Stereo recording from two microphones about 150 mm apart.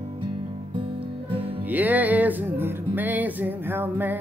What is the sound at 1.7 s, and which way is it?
Music, 10° right (ahead or behind).